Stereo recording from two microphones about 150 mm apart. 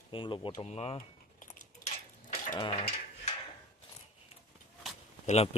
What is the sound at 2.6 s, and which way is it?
Speech, 35° left (ahead or behind).